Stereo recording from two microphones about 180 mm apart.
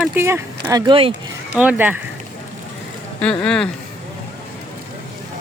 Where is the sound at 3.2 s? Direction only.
5° left (ahead or behind).